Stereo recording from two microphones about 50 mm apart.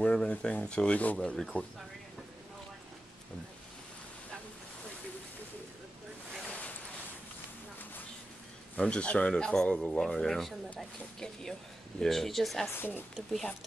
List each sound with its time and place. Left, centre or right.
0.0 s speech: centre
1.1 s speech: centre
6.4 s boat: left
8.7 s speech: left
9.8 s speech: centre
12.0 s speech: centre
12.7 s speech: left